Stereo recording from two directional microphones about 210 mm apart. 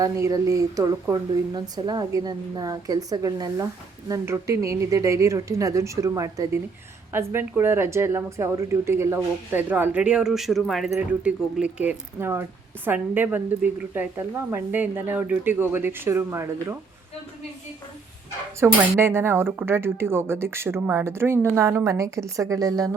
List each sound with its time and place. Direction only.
0.0 s a woman's voice: 15° right (ahead or behind)
18.6 s a woman's voice: 10° right (ahead or behind)